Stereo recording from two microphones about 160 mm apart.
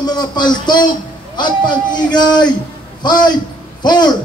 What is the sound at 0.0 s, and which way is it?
A man's voice, 25° left (ahead or behind).